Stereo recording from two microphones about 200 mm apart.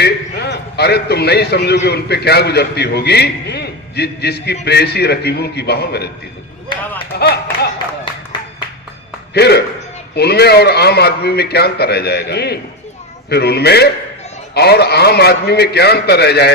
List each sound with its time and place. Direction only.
0.0 s a man's voice: 55° left (ahead or behind)
7.1 s a man's voice: 55° left (ahead or behind)
9.3 s a man's voice: 55° left (ahead or behind)